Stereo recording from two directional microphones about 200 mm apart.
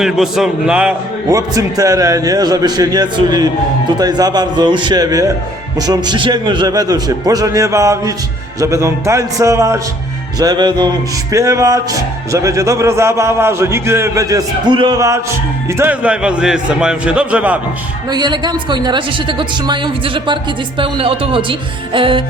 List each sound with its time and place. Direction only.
0.0 s a man's voice: centre (ahead or behind)
1.3 s a woman's voice: 15° right (ahead or behind)
18.1 s a woman's voice: 20° right (ahead or behind)